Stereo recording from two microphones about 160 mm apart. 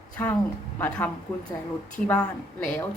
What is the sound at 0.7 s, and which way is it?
Speech, 10° left (ahead or behind).